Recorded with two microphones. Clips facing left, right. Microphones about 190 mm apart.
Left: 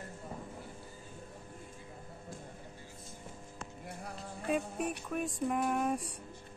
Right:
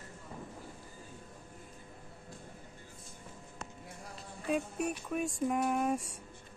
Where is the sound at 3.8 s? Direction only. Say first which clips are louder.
Left 4 dB; 60° left (ahead or behind).